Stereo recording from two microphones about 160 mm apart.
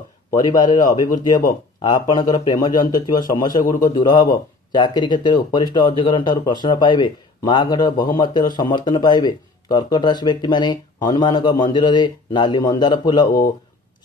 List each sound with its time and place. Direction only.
0.3 s a man's voice: 25° left (ahead or behind)